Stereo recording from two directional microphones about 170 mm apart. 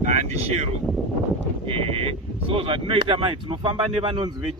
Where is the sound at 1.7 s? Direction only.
35° right (ahead or behind).